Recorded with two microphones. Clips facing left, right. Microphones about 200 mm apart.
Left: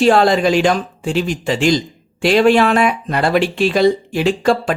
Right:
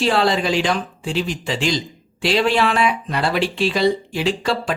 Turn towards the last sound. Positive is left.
turn(degrees=50)  # may be behind; listen again after turning